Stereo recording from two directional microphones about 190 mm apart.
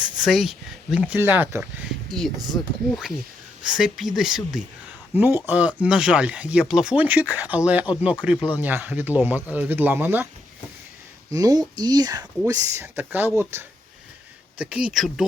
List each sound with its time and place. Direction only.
0.2 s speech: centre (ahead or behind)
11.3 s speech: 20° right (ahead or behind); by 15.2 s centre (ahead or behind)